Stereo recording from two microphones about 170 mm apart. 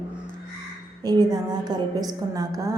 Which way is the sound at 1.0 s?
25° right (ahead or behind).